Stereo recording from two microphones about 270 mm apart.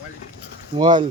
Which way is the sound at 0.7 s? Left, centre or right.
Centre.